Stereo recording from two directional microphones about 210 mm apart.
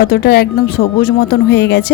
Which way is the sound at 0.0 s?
50° left (ahead or behind).